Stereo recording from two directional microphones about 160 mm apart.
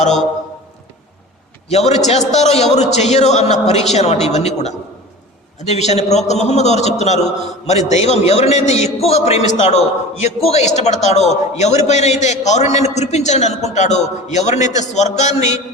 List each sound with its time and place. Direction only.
1.7 s a man's voice: 45° left (ahead or behind)